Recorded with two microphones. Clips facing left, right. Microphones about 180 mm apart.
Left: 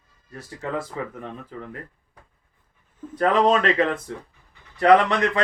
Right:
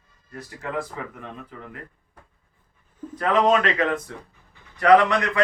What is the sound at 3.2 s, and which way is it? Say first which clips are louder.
Speech: left 1 dB; 35° left (ahead or behind).